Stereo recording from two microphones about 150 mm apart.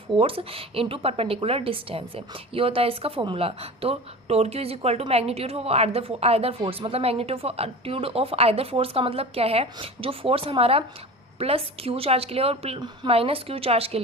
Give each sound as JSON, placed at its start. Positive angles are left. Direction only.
{"t": 0.2, "sound": "a woman's voice", "side_deg": -40}